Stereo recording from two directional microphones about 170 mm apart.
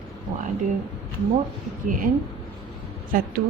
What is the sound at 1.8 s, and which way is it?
Speech, 55° right (ahead or behind).